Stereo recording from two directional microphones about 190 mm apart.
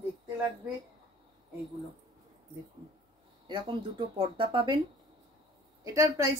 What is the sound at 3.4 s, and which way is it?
Speech, 25° right (ahead or behind).